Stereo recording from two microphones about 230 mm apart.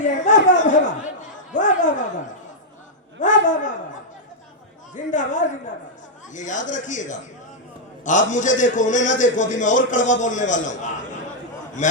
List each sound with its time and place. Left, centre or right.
0.0 s a sound: left
1.5 s a man's voice: left
4.9 s a man's voice: left